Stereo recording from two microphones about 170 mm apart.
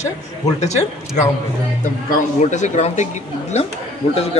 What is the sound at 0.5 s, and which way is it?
Speech, 40° left (ahead or behind).